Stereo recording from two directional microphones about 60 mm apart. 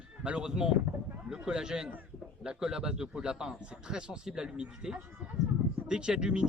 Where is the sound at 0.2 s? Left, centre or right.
Centre.